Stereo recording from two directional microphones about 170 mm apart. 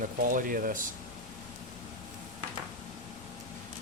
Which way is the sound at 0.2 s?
55° right (ahead or behind).